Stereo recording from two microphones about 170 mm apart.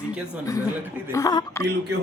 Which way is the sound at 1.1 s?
20° left (ahead or behind).